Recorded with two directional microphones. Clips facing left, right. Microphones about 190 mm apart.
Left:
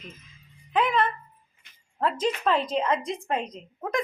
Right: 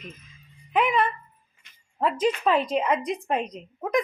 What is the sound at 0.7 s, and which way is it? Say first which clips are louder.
A woman's voice: right 1 dB; 10° right (ahead or behind).